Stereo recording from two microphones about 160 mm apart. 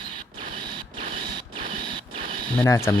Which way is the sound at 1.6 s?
30° right (ahead or behind).